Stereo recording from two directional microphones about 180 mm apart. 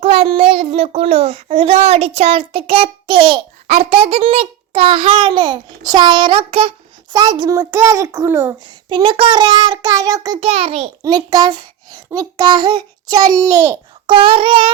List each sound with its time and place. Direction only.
0.0 s child singing: 35° right (ahead or behind); by 8.5 s 15° right (ahead or behind)
8.6 s a child's voice: 25° right (ahead or behind)
11.0 s a child's voice: 20° right (ahead or behind)